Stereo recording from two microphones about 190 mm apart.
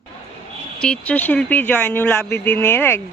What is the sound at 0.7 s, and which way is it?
Speech, 5° left (ahead or behind).